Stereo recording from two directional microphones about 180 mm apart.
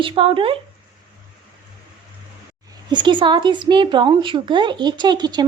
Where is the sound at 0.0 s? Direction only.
30° right (ahead or behind).